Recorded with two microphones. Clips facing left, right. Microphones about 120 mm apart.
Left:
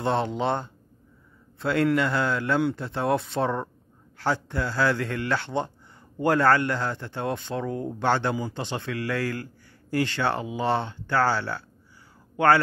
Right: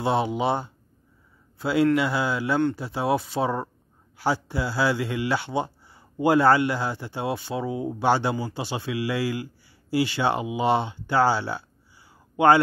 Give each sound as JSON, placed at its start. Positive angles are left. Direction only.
{"t": 0.0, "sound": "a man's voice", "side_deg": -10}